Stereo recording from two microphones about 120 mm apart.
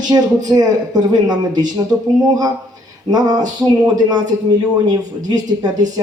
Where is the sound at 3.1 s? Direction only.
30° right (ahead or behind).